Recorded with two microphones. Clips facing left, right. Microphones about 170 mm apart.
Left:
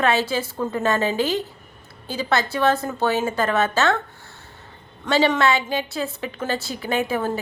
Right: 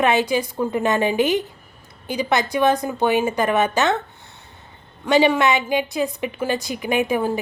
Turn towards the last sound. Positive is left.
turn(degrees=-15)  # may be behind; listen again after turning